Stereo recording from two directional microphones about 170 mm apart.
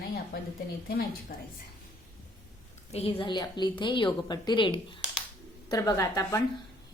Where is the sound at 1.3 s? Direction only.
60° left (ahead or behind).